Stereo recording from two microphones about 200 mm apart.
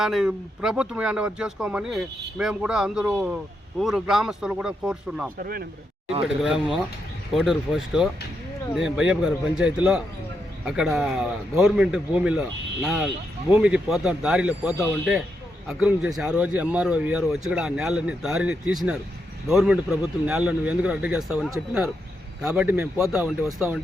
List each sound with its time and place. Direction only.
0.0 s speech: centre (ahead or behind)
5.4 s speech: 45° right (ahead or behind)
6.2 s speech: centre (ahead or behind)